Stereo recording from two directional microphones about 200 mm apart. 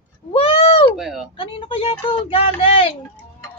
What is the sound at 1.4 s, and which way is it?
Speech, 25° left (ahead or behind).